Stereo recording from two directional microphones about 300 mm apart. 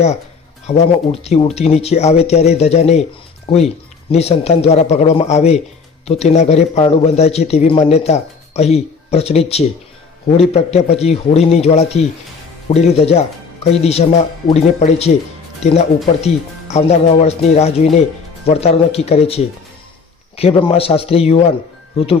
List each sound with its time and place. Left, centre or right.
0.7 s speech: left
4.1 s speech: left
16.2 s speech: left